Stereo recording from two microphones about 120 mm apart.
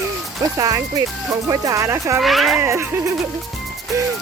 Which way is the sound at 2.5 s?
20° right (ahead or behind).